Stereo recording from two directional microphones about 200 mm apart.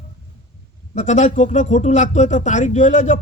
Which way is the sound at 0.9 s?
35° left (ahead or behind).